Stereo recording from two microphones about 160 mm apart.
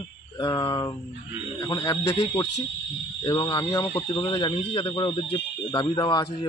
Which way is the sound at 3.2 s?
30° left (ahead or behind).